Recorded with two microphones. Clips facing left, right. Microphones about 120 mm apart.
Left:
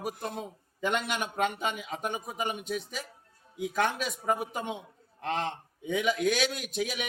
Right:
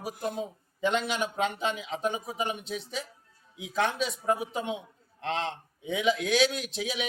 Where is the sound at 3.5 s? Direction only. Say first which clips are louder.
Even; 50° left (ahead or behind).